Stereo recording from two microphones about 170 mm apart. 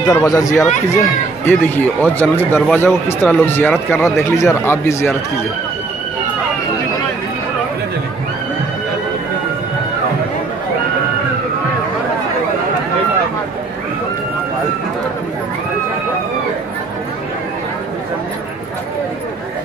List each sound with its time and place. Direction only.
0.1 s speech: 20° left (ahead or behind)